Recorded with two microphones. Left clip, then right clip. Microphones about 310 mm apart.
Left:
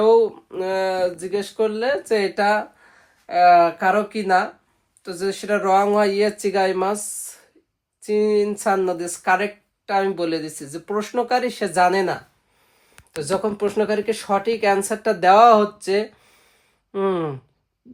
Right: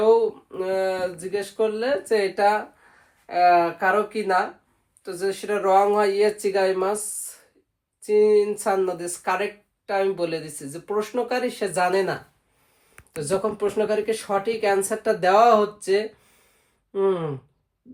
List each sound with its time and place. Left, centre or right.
0.0 s speech: left
8.0 s speech: left
13.2 s speech: left